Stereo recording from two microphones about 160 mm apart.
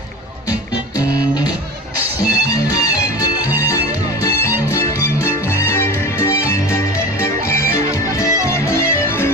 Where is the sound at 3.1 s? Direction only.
25° left (ahead or behind).